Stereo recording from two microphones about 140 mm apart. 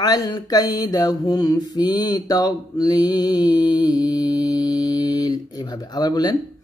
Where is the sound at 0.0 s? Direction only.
30° left (ahead or behind).